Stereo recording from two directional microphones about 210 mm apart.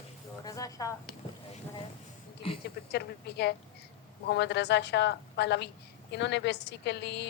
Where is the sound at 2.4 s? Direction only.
25° left (ahead or behind).